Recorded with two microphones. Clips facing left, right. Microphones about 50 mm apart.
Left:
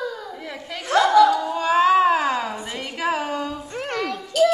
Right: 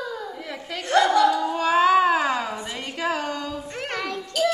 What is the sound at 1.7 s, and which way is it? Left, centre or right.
Cat, centre.